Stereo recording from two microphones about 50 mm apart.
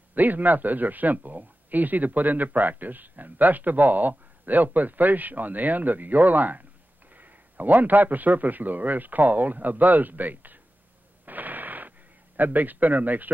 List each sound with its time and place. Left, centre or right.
0.1 s speech: right
11.2 s a sound: right
12.4 s speech: right